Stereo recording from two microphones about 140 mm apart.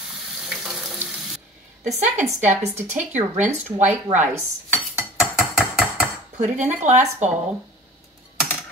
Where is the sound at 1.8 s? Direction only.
55° right (ahead or behind).